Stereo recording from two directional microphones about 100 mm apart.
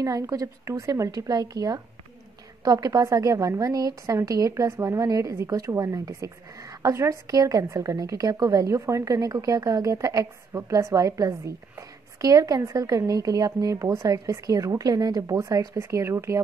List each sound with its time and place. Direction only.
0.0 s a woman's voice: 35° right (ahead or behind)